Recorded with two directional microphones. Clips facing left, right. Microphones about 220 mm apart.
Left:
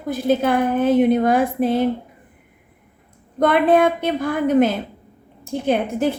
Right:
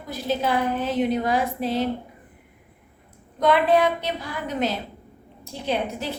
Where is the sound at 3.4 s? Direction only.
55° left (ahead or behind).